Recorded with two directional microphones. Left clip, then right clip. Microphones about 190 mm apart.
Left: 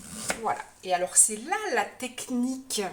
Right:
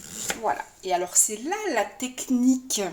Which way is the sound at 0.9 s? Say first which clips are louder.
Right 1 dB; 40° right (ahead or behind).